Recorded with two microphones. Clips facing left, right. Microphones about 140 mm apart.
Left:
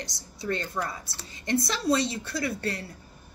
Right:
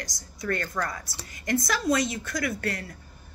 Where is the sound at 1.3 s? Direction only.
30° left (ahead or behind).